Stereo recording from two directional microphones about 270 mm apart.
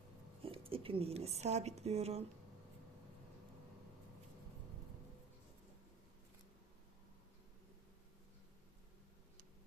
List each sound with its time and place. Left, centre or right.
0.4 s speech: centre